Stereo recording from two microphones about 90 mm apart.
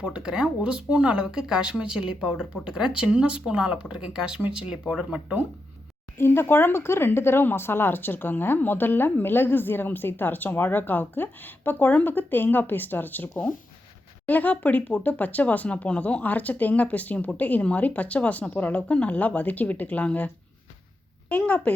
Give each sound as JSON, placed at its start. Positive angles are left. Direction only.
{"t": 0.0, "sound": "speech", "side_deg": -10}
{"t": 6.1, "sound": "speech", "side_deg": 25}